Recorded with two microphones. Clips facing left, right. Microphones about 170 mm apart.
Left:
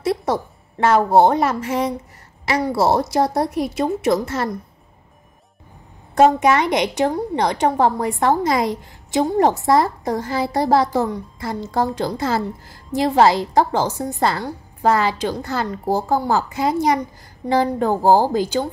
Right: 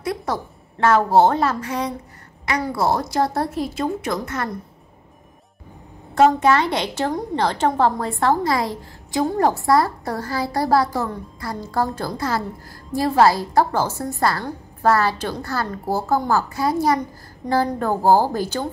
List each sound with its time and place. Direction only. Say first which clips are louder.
0.0 s a woman's voice: left 4 dB; 25° left (ahead or behind)
6.1 s a woman's voice: left 1 dB; 20° left (ahead or behind)